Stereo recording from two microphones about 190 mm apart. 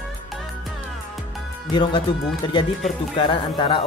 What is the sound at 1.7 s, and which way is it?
Speech, 25° left (ahead or behind).